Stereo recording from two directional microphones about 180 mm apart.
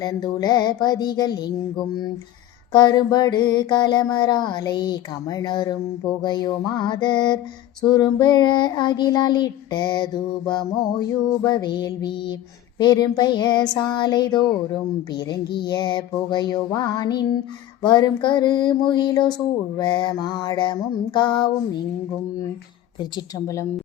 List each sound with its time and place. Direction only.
0.0 s child singing: 20° left (ahead or behind)
2.7 s child singing: 25° left (ahead or behind)
23.1 s a woman's voice: 15° left (ahead or behind)